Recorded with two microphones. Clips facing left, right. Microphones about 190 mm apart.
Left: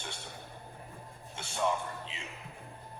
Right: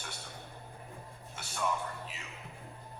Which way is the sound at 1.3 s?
25° left (ahead or behind).